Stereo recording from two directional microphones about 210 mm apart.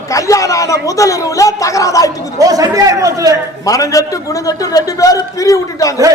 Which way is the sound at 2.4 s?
15° right (ahead or behind).